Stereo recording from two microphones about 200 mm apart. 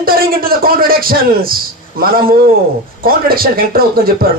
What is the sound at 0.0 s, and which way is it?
A man's voice, 45° right (ahead or behind).